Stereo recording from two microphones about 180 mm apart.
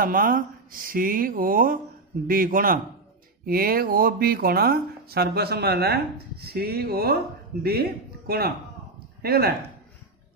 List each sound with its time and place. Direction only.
0.0 s a man's voice: 50° right (ahead or behind)